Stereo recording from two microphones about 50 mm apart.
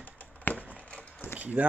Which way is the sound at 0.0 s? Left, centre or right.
Left.